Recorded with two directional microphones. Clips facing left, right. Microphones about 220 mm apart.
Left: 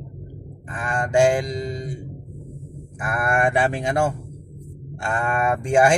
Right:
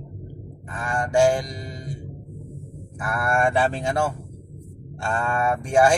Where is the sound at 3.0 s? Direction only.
20° left (ahead or behind).